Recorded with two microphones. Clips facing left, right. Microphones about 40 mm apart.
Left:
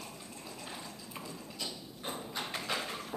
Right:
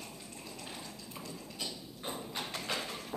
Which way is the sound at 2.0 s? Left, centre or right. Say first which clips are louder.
Left 1 dB; centre.